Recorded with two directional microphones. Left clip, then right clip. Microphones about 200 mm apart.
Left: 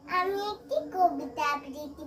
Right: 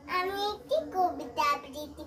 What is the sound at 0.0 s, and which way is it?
Child singing, 15° left (ahead or behind).